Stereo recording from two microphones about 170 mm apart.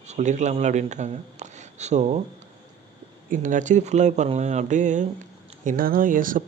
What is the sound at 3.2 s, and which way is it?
Speech, 50° right (ahead or behind).